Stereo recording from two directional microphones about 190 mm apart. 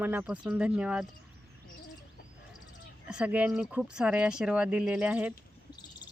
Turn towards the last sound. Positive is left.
turn(degrees=-5)  # may be behind; listen again after turning